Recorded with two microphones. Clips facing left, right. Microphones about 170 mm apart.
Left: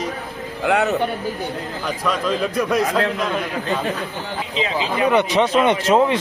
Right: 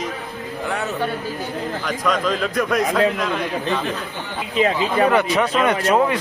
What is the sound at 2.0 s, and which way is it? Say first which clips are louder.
Speech: even; 5° left (ahead or behind).